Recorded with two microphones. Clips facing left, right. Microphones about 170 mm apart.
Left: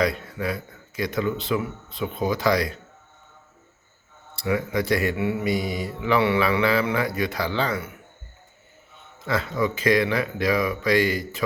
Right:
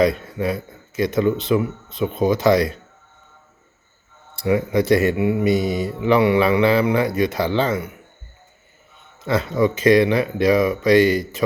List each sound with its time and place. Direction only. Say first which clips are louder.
0.0 s mantra: right 6 dB; 25° right (ahead or behind)
4.4 s mantra: right 6 dB; 25° right (ahead or behind)
9.2 s mantra: right 6 dB; 20° right (ahead or behind)